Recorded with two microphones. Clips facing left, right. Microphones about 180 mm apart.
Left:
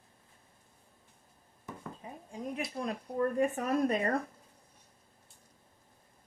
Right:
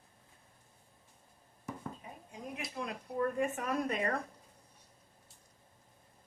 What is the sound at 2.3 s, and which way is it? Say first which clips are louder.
Speech: left 6 dB; 35° left (ahead or behind).